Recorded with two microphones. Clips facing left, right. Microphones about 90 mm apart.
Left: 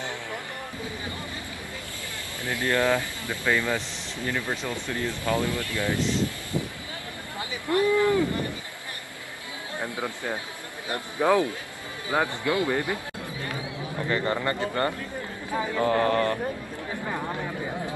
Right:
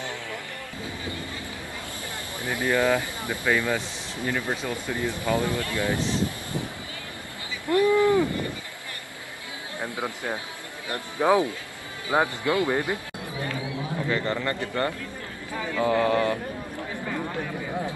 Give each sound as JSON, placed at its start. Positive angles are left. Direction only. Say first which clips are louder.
{"t": 2.4, "sound": "speech", "louder": "right 1 dB", "side_deg": -15}
{"t": 7.8, "sound": "a sound", "louder": "right 2 dB", "side_deg": -20}
{"t": 9.8, "sound": "speech", "louder": "right 1 dB", "side_deg": -20}
{"t": 13.9, "sound": "a sound", "louder": "even", "side_deg": 0}
{"t": 14.2, "sound": "speech", "louder": "left 1 dB", "side_deg": 15}
{"t": 15.5, "sound": "mantra", "louder": "left 3 dB", "side_deg": 25}
{"t": 15.8, "sound": "speech", "louder": "right 1 dB", "side_deg": -10}